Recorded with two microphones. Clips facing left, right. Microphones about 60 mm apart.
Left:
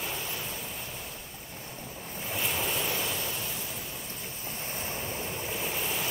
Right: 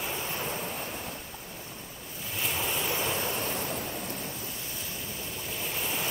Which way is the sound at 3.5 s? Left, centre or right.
Right.